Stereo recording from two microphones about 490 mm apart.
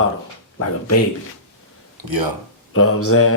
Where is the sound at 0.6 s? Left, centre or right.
Left.